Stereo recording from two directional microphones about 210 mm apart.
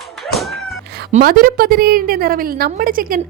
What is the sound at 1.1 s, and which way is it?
A woman's voice, 40° right (ahead or behind).